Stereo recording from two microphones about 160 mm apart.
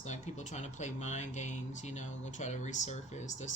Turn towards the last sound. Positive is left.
turn(degrees=45)  # may be behind; listen again after turning